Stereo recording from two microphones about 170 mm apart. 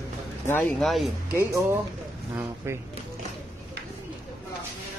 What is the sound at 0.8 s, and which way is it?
Speech, centre (ahead or behind).